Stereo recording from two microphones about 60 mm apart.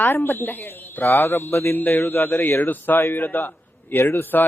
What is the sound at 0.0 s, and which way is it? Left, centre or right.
Speech, left.